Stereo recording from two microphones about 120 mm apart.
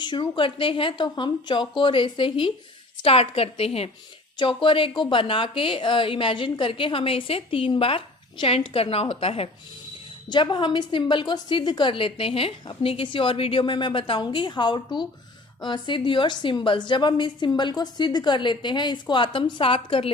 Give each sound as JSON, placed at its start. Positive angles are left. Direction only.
{"t": 0.0, "sound": "a woman's voice", "side_deg": 40}
{"t": 10.2, "sound": "a woman's voice", "side_deg": 40}